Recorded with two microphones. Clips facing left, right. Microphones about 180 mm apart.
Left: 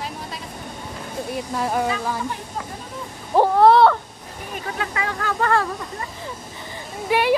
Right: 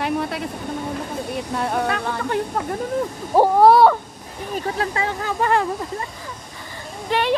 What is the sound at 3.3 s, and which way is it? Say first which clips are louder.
Speech: right 1 dB; 10° right (ahead or behind).